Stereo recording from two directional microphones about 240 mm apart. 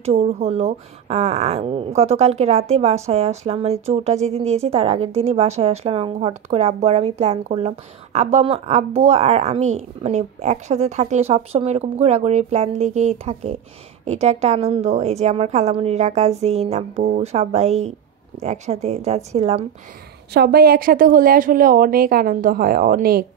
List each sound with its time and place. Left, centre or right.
0.0 s speech: right
20.3 s speech: right